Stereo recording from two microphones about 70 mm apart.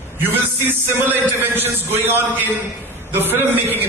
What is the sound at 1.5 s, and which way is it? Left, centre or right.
A man's voice, right.